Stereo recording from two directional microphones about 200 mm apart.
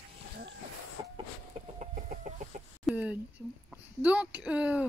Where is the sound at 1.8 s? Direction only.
40° right (ahead or behind).